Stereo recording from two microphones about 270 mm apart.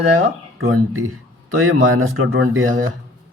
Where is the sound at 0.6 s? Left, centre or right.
Right.